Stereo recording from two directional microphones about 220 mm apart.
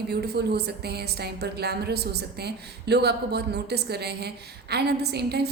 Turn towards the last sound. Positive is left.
turn(degrees=-50)  # may be behind; listen again after turning